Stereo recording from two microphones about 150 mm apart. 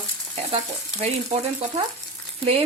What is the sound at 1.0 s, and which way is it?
Frying, 45° right (ahead or behind).